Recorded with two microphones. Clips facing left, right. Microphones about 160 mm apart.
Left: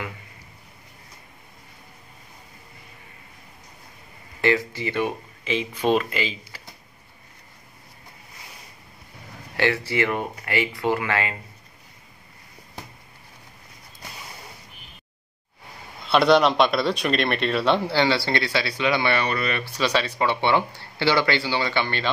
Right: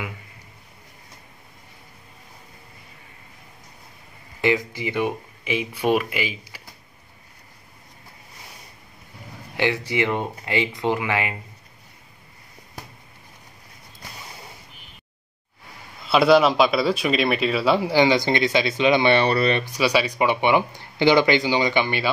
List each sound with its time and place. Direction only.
4.4 s a man's voice: 15° right (ahead or behind)
9.6 s speech: 15° right (ahead or behind)
16.1 s a man's voice: 5° right (ahead or behind); by 19.6 s 30° right (ahead or behind)
19.6 s a man's voice: 10° right (ahead or behind)